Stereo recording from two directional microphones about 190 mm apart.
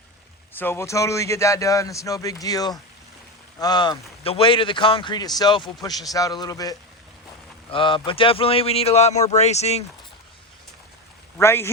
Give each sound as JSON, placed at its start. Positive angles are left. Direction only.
{"t": 0.6, "sound": "a man's voice", "side_deg": 15}
{"t": 11.3, "sound": "speech", "side_deg": 15}